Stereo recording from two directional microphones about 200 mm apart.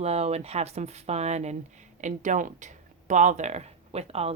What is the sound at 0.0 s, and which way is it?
Speech, 30° right (ahead or behind).